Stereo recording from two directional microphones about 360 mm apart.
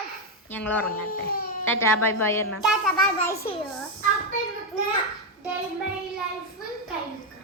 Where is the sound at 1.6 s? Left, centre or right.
Centre.